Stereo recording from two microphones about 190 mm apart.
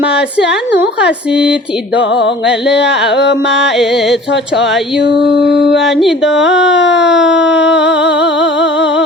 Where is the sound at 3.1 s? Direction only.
65° left (ahead or behind).